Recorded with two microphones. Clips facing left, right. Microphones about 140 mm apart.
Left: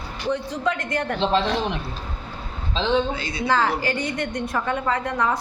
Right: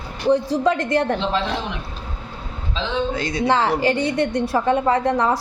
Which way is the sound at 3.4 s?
25° right (ahead or behind).